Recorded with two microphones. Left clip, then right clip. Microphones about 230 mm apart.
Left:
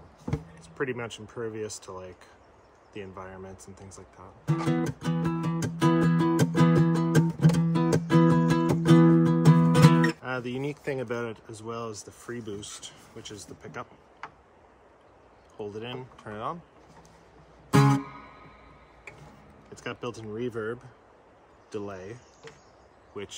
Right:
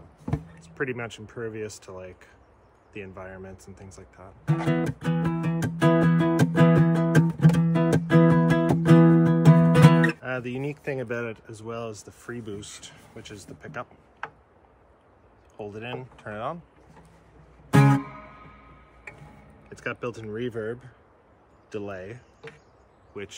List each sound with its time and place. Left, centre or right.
0.3 s a sound: centre
1.3 s speech: centre
4.5 s music: centre
11.8 s speech: centre
15.5 s speech: centre
17.7 s music: centre
20.5 s speech: centre